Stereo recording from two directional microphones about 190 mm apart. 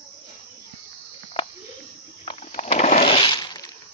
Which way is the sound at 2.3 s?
30° left (ahead or behind).